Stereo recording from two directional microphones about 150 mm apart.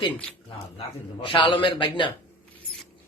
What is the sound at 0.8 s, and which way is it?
A man's voice, 35° left (ahead or behind).